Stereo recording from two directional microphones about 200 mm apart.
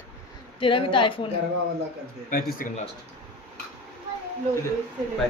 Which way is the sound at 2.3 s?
45° left (ahead or behind).